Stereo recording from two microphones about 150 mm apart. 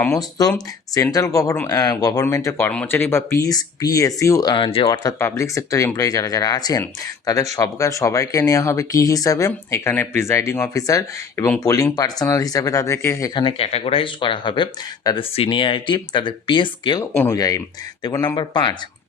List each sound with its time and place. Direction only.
0.0 s speech: 20° left (ahead or behind)
5.2 s speech: 20° left (ahead or behind)
13.3 s speech: 35° left (ahead or behind)